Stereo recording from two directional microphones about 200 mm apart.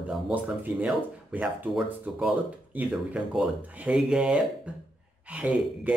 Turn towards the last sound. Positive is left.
turn(degrees=-5)  # may be behind; listen again after turning